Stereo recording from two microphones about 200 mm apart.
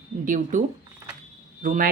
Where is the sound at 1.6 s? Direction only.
45° right (ahead or behind).